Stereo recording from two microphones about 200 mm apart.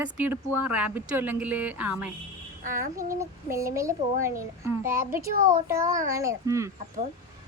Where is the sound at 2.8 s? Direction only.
45° right (ahead or behind).